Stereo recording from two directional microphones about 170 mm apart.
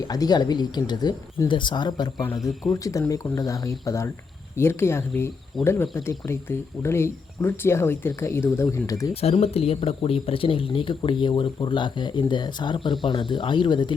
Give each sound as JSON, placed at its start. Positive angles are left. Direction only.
{"t": 0.1, "sound": "speech", "side_deg": 25}
{"t": 2.4, "sound": "speech", "side_deg": 0}
{"t": 2.7, "sound": "speech", "side_deg": 20}
{"t": 9.2, "sound": "speech", "side_deg": 35}